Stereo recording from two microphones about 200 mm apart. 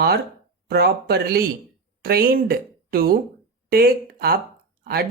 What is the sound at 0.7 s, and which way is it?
A woman's voice, 50° right (ahead or behind).